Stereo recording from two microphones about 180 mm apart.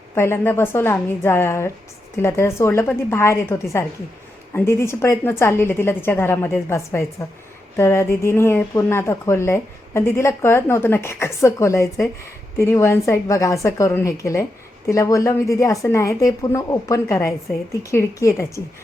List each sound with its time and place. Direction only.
0.1 s speech: 15° left (ahead or behind)